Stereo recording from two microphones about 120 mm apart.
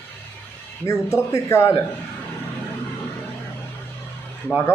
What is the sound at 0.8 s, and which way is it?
Speech, 25° left (ahead or behind).